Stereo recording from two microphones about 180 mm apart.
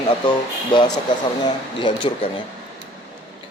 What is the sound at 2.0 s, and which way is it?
Speech, 30° left (ahead or behind).